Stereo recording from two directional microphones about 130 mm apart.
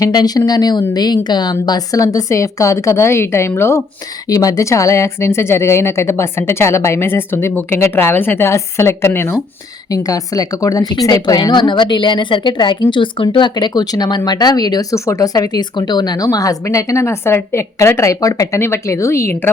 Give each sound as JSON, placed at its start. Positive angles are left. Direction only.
{"t": 0.0, "sound": "a woman's voice", "side_deg": 30}